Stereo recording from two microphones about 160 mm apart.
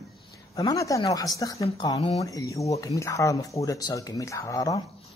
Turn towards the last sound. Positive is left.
turn(degrees=25)  # may be behind; listen again after turning